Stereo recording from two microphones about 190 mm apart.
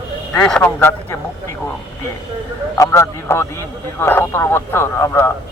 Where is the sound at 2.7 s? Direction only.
15° left (ahead or behind).